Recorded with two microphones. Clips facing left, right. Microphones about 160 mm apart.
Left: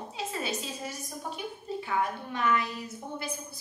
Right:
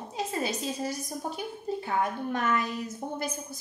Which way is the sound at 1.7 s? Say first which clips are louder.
Right 1 dB; 45° right (ahead or behind).